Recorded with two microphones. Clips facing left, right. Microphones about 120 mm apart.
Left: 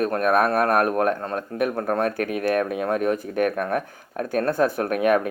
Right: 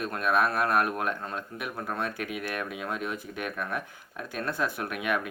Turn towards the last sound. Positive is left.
turn(degrees=45)  # may be behind; listen again after turning